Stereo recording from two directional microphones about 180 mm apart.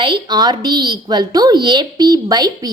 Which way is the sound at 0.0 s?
25° right (ahead or behind).